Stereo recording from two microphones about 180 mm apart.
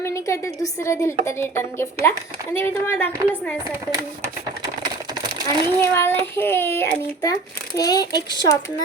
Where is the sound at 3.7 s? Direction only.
15° right (ahead or behind).